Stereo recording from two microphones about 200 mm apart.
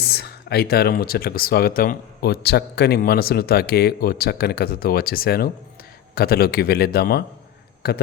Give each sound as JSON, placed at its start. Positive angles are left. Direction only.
{"t": 0.0, "sound": "speech", "side_deg": 55}